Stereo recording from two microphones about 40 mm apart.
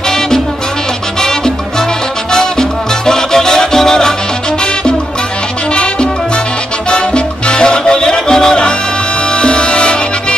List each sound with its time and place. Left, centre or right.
3.1 s music: centre
6.9 s salsa music: left
9.4 s music: left